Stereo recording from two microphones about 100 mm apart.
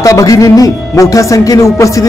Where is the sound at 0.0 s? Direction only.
35° left (ahead or behind).